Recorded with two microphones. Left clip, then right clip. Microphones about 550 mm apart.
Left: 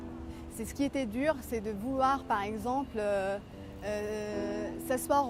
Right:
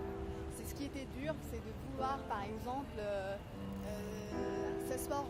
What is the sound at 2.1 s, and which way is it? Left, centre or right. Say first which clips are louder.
Speech: left 10 dB; left.